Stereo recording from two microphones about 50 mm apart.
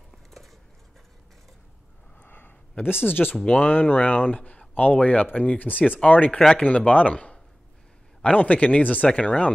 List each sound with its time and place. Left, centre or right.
0.1 s a sound: centre
2.1 s sniff: left
3.1 s speech: left
3.4 s speech: left
6.3 s speech: centre
6.9 s speech: left